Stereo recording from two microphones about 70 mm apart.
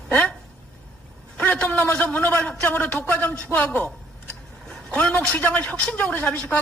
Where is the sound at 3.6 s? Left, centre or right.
Centre.